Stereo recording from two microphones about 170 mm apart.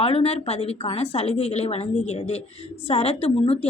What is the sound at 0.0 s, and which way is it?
A woman's voice, 35° left (ahead or behind).